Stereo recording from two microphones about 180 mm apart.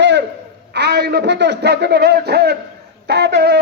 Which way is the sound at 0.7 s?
65° right (ahead or behind).